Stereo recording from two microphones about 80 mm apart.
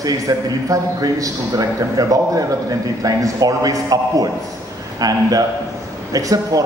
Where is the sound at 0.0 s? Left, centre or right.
Right.